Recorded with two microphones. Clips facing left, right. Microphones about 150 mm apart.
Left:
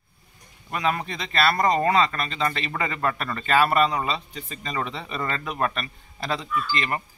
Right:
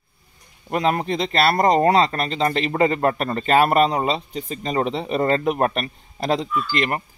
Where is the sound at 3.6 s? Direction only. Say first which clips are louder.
Right 3 dB; 50° right (ahead or behind).